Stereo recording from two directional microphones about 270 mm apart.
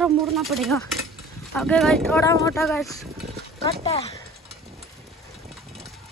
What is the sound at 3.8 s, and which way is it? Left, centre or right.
Speech, left.